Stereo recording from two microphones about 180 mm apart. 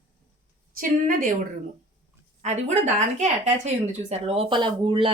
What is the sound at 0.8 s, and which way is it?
Speech, 50° right (ahead or behind).